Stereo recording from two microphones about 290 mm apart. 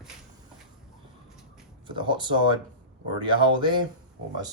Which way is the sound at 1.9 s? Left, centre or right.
Centre.